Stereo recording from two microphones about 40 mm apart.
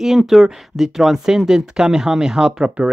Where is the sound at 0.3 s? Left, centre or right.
Centre.